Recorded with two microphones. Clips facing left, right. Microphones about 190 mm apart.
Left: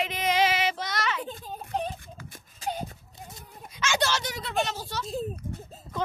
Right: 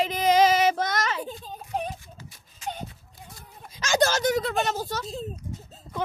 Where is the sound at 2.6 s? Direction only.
35° left (ahead or behind).